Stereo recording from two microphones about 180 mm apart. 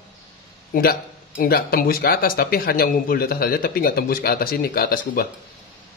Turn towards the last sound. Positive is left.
turn(degrees=55)  # may be behind; listen again after turning